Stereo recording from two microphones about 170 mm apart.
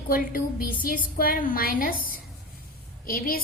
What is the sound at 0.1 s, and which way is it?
A woman's voice, 55° left (ahead or behind).